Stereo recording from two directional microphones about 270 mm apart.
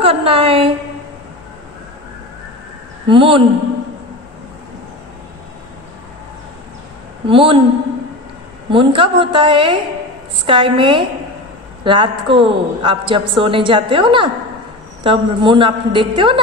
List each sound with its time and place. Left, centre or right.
0.0 s a sound: right
3.1 s a woman's voice: centre
7.2 s a woman's voice: centre
8.6 s a woman's voice: centre